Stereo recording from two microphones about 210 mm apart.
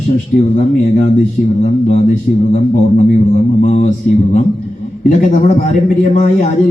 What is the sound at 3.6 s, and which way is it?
A man's voice, 35° left (ahead or behind).